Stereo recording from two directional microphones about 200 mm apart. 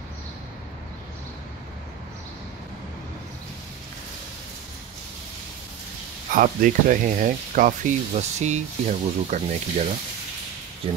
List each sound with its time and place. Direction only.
6.3 s speech: 40° right (ahead or behind)